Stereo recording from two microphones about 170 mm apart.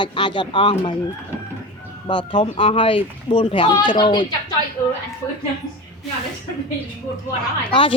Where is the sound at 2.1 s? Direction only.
30° left (ahead or behind).